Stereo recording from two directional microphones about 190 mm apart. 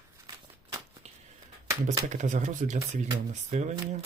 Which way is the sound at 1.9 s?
40° right (ahead or behind).